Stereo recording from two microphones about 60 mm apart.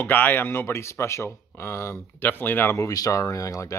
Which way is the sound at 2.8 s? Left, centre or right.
Left.